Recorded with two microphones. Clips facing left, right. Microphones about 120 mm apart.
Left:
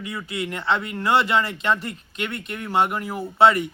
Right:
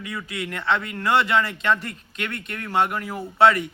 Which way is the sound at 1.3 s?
Centre (ahead or behind).